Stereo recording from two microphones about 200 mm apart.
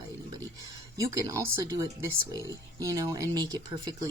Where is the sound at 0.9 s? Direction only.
15° right (ahead or behind).